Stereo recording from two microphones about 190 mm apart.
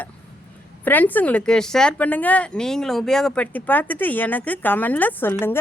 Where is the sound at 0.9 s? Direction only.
10° left (ahead or behind).